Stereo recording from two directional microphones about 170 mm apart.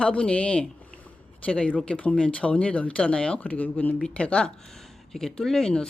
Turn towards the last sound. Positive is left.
turn(degrees=5)  # may be behind; listen again after turning